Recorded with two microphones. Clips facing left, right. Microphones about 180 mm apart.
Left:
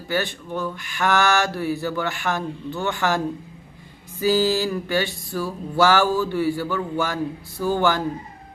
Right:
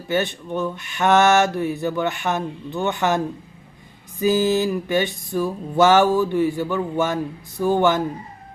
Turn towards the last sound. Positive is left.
turn(degrees=-20)  # may be behind; listen again after turning